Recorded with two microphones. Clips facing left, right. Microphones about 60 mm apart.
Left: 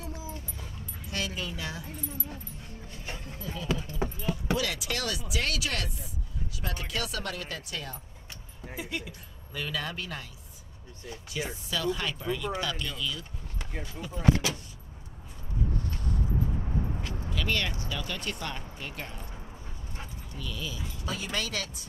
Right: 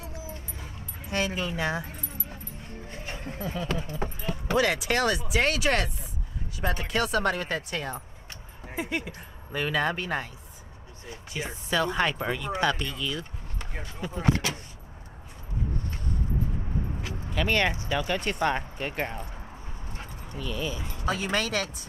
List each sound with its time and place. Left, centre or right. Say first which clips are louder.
0.1 s dog: even; right
3.2 s speech: right 8 dB; right
17.2 s speech: right 6 dB; right
20.3 s speech: right 6 dB; right